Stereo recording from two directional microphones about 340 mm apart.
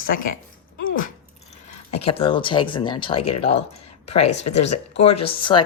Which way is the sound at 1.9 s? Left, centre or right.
Centre.